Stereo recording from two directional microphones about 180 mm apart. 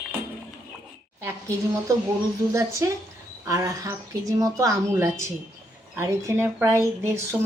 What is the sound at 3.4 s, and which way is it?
A woman's voice, 20° right (ahead or behind).